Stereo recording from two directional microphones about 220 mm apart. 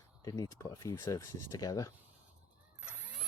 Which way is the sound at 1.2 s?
90° left.